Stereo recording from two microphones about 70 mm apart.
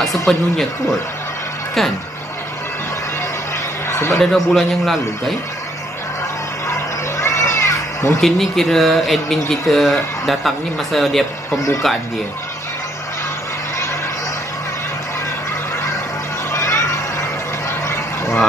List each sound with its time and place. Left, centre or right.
0.3 s speech: centre
3.9 s a sound: left
4.2 s speech: centre
6.7 s children playing: left
8.2 s speech: centre
16.5 s a sound: left
17.6 s vehicle: left